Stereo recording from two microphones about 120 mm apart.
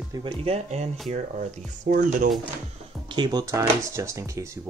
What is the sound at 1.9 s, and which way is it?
Speech, 90° right.